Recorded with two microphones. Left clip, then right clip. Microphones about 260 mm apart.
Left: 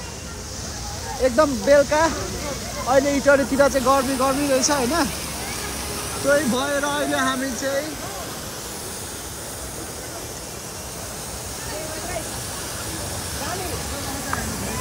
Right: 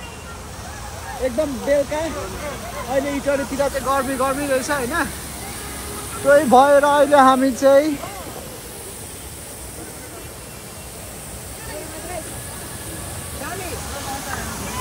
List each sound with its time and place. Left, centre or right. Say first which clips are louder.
1.2 s speech: left 4 dB; left
3.8 s speech: left 1 dB; centre
6.2 s speech: right 8 dB; centre